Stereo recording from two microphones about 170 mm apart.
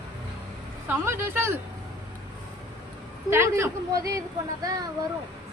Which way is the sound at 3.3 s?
15° right (ahead or behind).